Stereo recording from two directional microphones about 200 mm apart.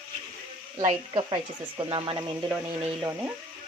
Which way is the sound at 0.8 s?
25° right (ahead or behind).